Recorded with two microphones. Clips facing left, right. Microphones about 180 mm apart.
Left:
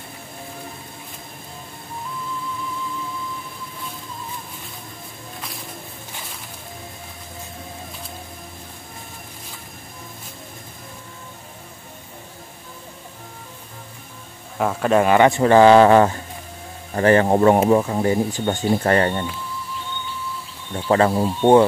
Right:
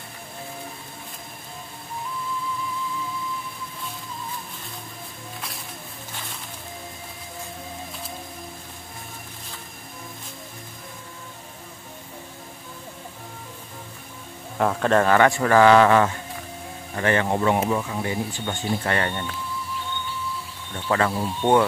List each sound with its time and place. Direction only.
14.6 s speech: 5° left (ahead or behind); by 19.2 s 35° left (ahead or behind)
20.7 s speech: 30° left (ahead or behind)